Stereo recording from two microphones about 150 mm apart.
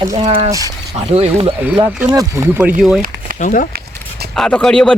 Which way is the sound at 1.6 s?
10° right (ahead or behind).